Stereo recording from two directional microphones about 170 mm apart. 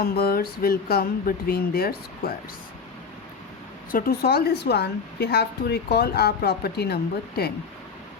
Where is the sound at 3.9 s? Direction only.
55° left (ahead or behind).